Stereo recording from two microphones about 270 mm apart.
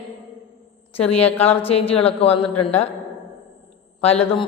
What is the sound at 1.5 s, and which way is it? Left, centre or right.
Speech, left.